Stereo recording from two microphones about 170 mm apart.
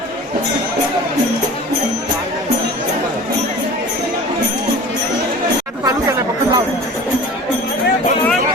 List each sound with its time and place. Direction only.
5.8 s chatter: 20° right (ahead or behind)